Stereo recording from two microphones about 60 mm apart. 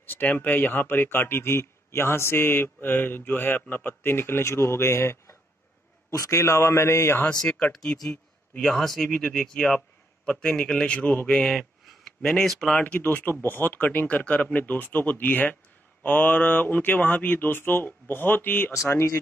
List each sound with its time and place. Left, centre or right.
0.0 s speech: left
6.3 s speech: left
7.3 s a man's voice: centre
11.3 s speech: centre
12.8 s speech: left
18.9 s speech: left